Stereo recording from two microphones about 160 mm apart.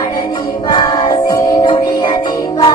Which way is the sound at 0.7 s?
35° left (ahead or behind).